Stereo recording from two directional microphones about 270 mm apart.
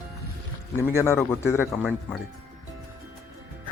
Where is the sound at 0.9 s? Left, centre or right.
Centre.